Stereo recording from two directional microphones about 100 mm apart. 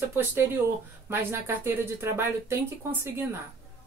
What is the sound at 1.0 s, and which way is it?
Speech, 25° right (ahead or behind).